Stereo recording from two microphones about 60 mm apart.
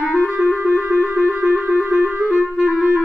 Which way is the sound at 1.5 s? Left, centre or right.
Right.